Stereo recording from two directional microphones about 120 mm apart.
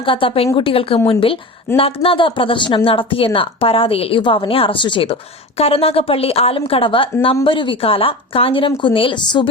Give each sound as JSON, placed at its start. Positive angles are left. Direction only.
{"t": 0.0, "sound": "a woman's voice", "side_deg": 45}